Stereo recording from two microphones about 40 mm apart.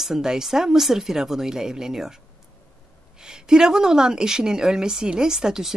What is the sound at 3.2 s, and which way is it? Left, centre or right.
Speech, centre.